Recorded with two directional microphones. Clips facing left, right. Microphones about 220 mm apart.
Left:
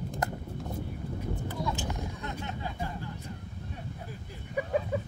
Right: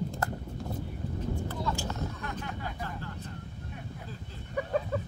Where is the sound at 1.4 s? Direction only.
15° left (ahead or behind).